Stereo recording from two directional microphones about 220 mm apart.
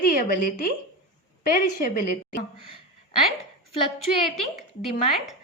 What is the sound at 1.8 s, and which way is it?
Speech, 35° left (ahead or behind).